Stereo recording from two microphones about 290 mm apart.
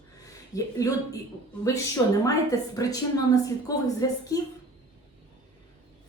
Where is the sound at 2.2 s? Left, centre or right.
Centre.